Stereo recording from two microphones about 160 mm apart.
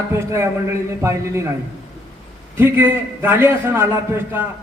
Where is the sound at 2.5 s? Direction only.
15° right (ahead or behind).